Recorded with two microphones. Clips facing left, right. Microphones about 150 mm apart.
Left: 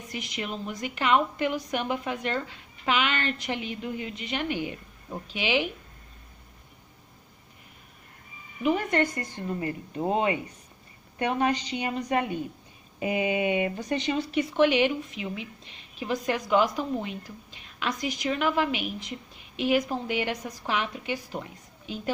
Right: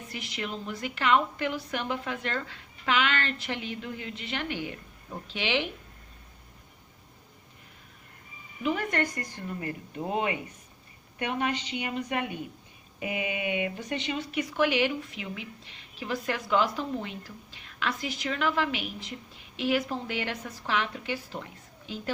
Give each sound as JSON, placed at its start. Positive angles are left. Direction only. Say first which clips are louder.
{"t": 0.1, "sound": "speech", "louder": "left 2 dB", "side_deg": 20}
{"t": 8.6, "sound": "a woman's voice", "louder": "left 4 dB", "side_deg": 20}